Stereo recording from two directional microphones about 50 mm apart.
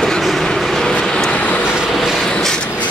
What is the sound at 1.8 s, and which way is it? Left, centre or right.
Train, centre.